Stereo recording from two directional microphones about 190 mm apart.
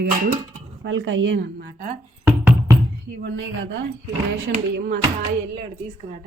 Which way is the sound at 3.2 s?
75° right (ahead or behind).